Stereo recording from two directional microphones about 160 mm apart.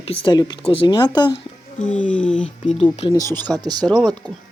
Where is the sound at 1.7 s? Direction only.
5° left (ahead or behind).